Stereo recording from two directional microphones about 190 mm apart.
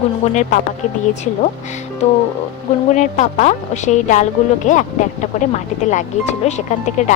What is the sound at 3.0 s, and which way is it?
A woman's voice, 40° left (ahead or behind).